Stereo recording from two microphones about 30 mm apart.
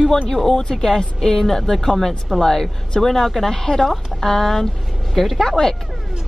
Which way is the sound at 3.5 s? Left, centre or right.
Centre.